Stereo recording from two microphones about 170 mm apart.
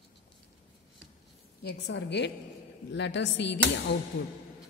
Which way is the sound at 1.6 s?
80° left.